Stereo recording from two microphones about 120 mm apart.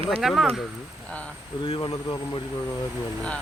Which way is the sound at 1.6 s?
45° left (ahead or behind).